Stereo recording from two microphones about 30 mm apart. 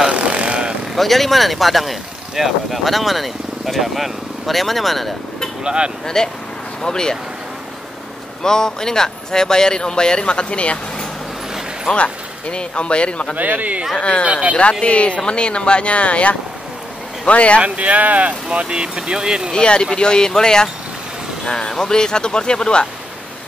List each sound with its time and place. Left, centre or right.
0.1 s vehicle: right
0.9 s speech: centre
5.6 s speech: right
6.0 s speech: centre
8.4 s speech: centre; by 10.8 s left
11.9 s speech: left
13.4 s speech: right
13.9 s speech: left
14.2 s speech: right
14.9 s speech: left
17.6 s speech: right
18.5 s speech: right
19.5 s speech: left